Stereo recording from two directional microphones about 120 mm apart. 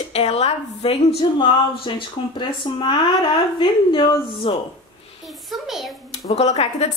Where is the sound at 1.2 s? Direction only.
45° left (ahead or behind).